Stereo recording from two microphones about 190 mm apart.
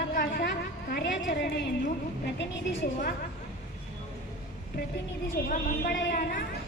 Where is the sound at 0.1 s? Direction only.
55° left (ahead or behind).